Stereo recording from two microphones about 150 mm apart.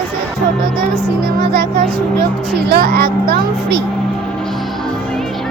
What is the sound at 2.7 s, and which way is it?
Speech, 90° right.